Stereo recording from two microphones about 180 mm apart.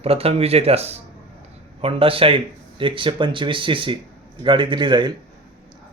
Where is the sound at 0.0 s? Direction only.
35° right (ahead or behind).